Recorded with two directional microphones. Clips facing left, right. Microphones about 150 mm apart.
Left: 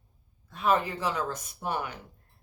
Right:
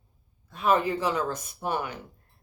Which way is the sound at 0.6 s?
15° right (ahead or behind).